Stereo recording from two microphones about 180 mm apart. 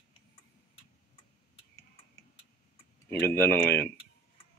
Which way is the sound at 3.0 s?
10° left (ahead or behind).